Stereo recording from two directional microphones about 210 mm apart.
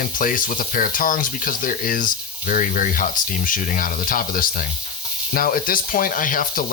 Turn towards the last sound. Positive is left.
turn(degrees=40)  # may be behind; listen again after turning